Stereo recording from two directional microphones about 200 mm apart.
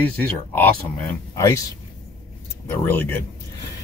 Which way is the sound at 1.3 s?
15° left (ahead or behind).